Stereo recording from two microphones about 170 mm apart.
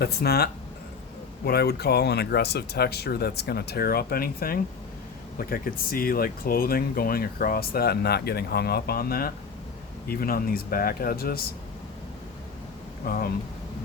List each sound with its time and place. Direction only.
0.0 s speech: 70° left (ahead or behind)
13.1 s speech: 55° left (ahead or behind)